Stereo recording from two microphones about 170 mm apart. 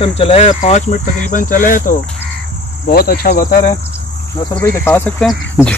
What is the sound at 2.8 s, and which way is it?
Speech, 65° left (ahead or behind).